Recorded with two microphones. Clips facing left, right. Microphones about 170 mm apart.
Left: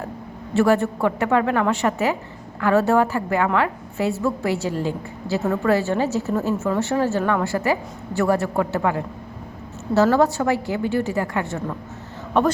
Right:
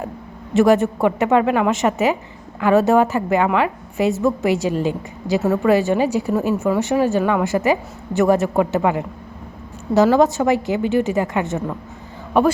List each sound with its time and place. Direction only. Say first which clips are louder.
0.5 s a woman's voice: right 4 dB; 20° right (ahead or behind)